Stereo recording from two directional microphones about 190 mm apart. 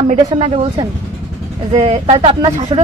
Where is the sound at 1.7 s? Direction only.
35° right (ahead or behind).